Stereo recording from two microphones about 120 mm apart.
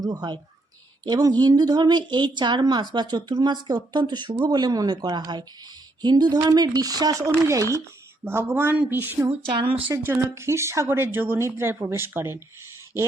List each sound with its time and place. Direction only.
0.0 s a woman's voice: 35° right (ahead or behind)